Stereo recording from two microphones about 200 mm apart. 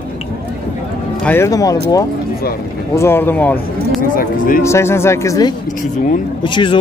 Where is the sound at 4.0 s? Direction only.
45° left (ahead or behind).